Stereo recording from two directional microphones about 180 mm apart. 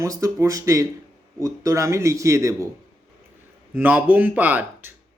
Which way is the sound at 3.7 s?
10° right (ahead or behind).